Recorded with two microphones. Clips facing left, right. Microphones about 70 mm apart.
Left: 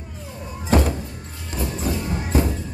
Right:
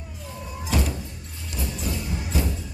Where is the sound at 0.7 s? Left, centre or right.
Left.